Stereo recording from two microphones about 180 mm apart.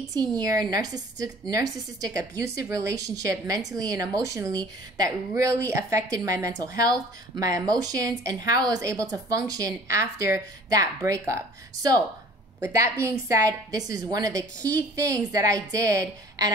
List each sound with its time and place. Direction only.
0.1 s a woman's voice: 20° right (ahead or behind)